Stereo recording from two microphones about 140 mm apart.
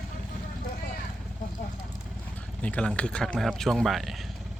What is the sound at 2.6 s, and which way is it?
Speech, 10° left (ahead or behind).